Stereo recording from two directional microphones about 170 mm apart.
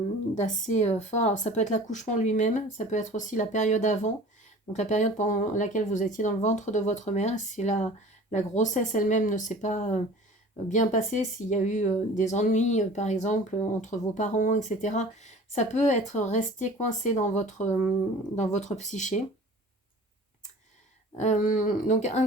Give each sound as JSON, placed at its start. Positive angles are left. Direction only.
{"t": 0.3, "sound": "speech", "side_deg": 45}
{"t": 21.2, "sound": "speech", "side_deg": 45}